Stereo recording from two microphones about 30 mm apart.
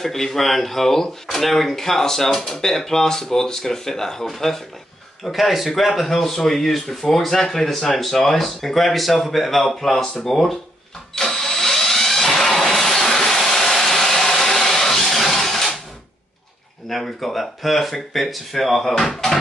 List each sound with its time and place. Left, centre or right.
0.0 s speech: centre
5.3 s speech: centre
11.1 s engine: centre
17.0 s speech: centre